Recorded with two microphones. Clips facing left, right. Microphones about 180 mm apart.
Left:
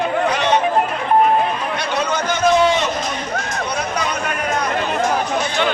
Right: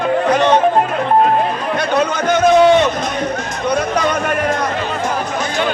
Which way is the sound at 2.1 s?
55° right (ahead or behind).